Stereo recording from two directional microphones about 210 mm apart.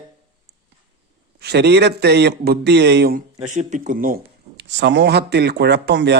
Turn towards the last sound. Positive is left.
turn(degrees=-55)  # may be behind; listen again after turning